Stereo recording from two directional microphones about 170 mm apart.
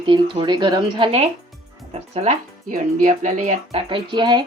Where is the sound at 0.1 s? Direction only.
25° right (ahead or behind).